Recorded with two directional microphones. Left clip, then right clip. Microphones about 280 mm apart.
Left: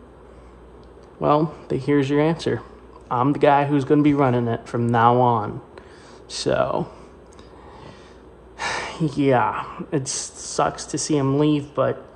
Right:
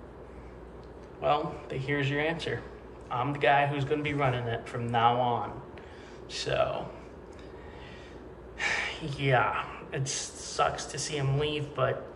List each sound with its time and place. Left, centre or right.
1.2 s speech: left
8.5 s speech: left